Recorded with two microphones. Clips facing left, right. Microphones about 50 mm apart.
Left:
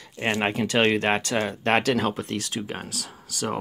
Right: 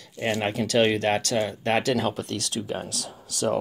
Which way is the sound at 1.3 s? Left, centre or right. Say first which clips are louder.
Left 1 dB; left.